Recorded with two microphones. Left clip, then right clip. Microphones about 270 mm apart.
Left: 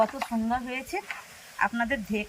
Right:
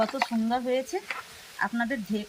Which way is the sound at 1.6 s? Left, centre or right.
Centre.